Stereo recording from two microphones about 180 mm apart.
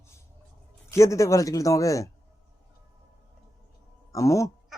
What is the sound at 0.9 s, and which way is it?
Speech, 15° left (ahead or behind).